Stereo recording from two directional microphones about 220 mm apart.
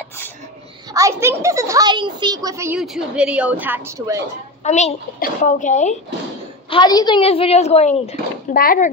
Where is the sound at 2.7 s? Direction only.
5° right (ahead or behind).